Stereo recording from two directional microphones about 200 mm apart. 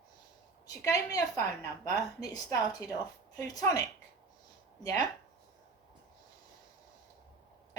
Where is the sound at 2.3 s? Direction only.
15° left (ahead or behind).